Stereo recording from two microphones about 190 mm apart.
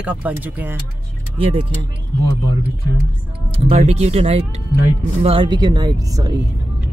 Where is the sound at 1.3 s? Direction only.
30° right (ahead or behind).